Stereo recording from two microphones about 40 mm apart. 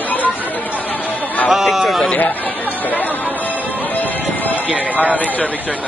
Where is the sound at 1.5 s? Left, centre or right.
Centre.